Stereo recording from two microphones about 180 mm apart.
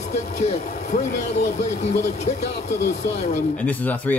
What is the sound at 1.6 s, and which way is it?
Speech, 40° left (ahead or behind).